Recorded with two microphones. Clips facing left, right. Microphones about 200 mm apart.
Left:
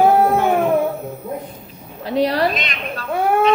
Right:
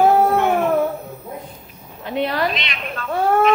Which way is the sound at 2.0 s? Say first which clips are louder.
Left 4 dB; 35° left (ahead or behind).